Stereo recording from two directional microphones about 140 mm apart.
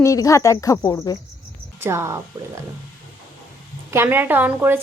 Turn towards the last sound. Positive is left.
turn(degrees=-15)  # may be behind; listen again after turning